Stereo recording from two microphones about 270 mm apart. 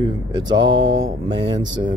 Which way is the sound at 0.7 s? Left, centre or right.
Right.